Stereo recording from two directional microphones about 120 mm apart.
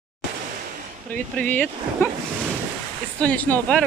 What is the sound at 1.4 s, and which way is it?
Speech, 15° left (ahead or behind).